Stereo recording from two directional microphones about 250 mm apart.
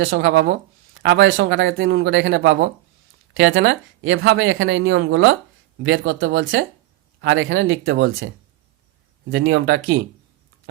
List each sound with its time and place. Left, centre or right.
0.0 s speech: right
9.3 s speech: right